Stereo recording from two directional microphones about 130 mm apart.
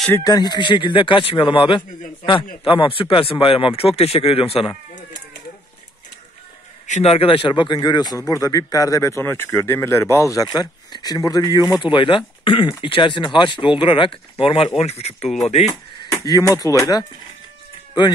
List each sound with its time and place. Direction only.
0.2 s a man's voice: 30° left (ahead or behind); by 4.7 s 45° left (ahead or behind)
6.9 s a man's voice: 50° left (ahead or behind)
16.0 s speech: 30° left (ahead or behind)